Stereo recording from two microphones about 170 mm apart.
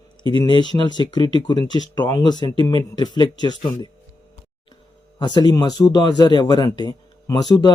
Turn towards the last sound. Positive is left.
turn(degrees=25)  # may be behind; listen again after turning